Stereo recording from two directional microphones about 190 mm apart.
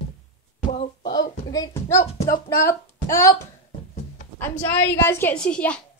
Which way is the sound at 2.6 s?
15° left (ahead or behind).